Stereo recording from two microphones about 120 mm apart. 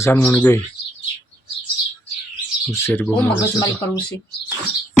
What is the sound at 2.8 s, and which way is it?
Speech, 15° left (ahead or behind).